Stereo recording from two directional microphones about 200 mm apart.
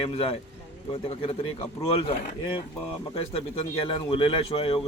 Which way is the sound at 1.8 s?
25° left (ahead or behind).